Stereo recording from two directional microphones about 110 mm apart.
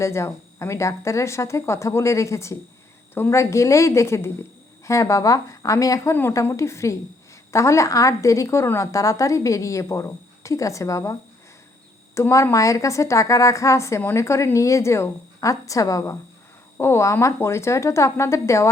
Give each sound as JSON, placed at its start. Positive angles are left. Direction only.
{"t": 0.0, "sound": "a woman's voice", "side_deg": 25}